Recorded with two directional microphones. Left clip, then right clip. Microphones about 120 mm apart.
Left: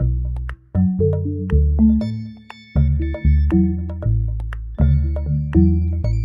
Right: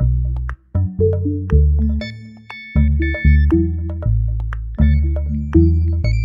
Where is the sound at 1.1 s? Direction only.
15° left (ahead or behind).